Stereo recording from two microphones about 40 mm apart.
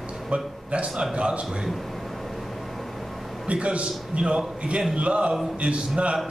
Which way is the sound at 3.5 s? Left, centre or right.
Right.